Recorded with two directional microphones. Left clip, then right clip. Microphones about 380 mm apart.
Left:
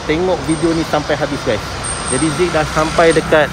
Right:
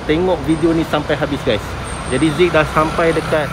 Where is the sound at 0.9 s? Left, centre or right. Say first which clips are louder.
Left 1 dB; centre.